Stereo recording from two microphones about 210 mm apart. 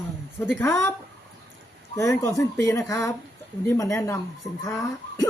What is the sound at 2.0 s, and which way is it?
Speech, 15° left (ahead or behind).